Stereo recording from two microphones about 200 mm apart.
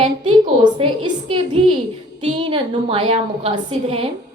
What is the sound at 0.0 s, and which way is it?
A woman's voice, 25° right (ahead or behind).